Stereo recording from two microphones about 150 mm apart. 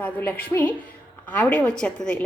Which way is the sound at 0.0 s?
10° left (ahead or behind).